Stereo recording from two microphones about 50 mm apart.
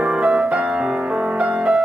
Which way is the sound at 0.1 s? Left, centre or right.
Centre.